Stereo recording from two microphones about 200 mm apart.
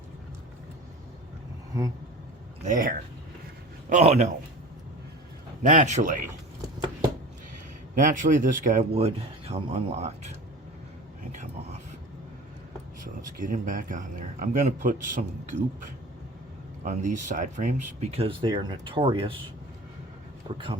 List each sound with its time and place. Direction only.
2.6 s speech: 45° right (ahead or behind)
5.6 s speech: 35° right (ahead or behind)
7.9 s speech: 40° right (ahead or behind)
13.4 s speech: 45° right (ahead or behind)
16.8 s speech: 35° right (ahead or behind)
20.5 s speech: 25° right (ahead or behind)